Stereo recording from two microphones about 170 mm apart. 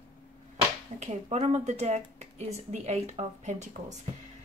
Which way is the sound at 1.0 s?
40° right (ahead or behind).